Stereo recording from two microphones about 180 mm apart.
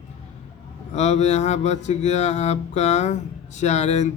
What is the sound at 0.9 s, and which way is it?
Mantra, 40° left (ahead or behind).